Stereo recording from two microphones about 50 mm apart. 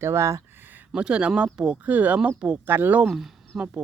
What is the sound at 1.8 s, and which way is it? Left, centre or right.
Speech, right.